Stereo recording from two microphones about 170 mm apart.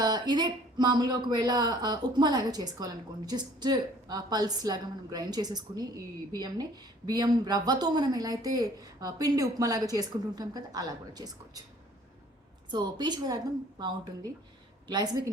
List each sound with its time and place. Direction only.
0.0 s speech: 25° right (ahead or behind)
12.7 s speech: 25° right (ahead or behind)